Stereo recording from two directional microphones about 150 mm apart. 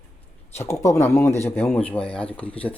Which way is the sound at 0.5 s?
20° left (ahead or behind).